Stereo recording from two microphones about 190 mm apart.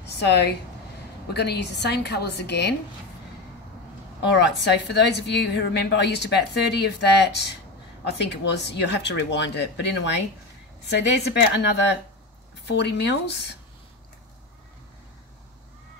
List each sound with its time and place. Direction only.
0.0 s a woman's voice: 65° left (ahead or behind)
4.3 s a woman's voice: 65° left (ahead or behind)
11.5 s a woman's voice: 65° left (ahead or behind)